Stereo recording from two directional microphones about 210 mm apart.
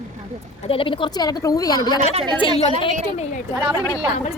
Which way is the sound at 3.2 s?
30° left (ahead or behind).